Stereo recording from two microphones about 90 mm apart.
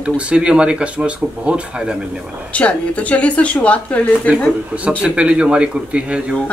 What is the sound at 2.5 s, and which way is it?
Speech, 15° left (ahead or behind).